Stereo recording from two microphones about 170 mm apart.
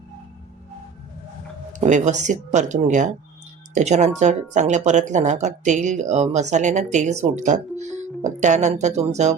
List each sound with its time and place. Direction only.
1.7 s speech: 45° right (ahead or behind)